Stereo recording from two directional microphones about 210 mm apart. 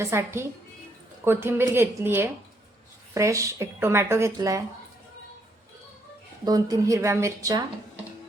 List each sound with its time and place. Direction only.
0.0 s speech: 10° right (ahead or behind)
6.4 s speech: 15° right (ahead or behind)